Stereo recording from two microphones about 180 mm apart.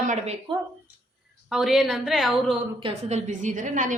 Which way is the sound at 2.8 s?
35° right (ahead or behind).